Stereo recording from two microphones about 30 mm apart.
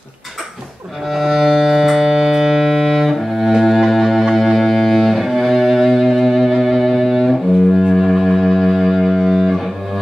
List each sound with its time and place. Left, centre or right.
1.1 s music: centre
4.4 s cello: centre
6.6 s music: centre
8.1 s music: centre